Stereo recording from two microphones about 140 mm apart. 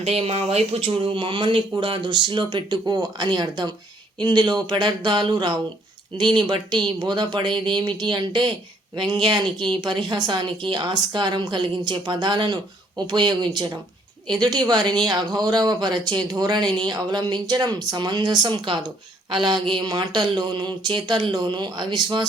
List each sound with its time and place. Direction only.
0.3 s speech: 45° right (ahead or behind)